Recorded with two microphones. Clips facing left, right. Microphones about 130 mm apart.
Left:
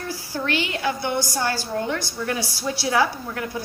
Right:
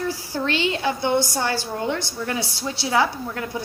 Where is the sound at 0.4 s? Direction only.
25° right (ahead or behind).